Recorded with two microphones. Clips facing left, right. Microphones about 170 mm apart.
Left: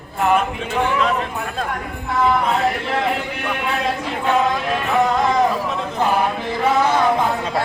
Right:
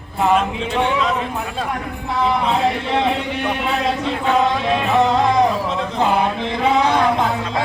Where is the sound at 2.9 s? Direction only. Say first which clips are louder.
Right 2 dB; 20° right (ahead or behind).